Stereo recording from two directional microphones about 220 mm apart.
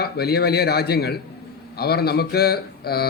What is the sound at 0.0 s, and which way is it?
Speech, 45° left (ahead or behind).